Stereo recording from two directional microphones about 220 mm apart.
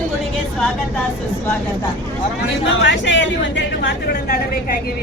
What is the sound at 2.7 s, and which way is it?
Speech, 55° left (ahead or behind).